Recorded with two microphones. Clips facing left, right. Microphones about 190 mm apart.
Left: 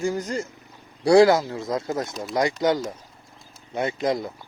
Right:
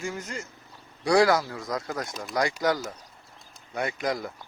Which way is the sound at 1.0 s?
25° left (ahead or behind).